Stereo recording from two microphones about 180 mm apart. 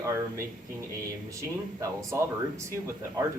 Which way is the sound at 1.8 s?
20° right (ahead or behind).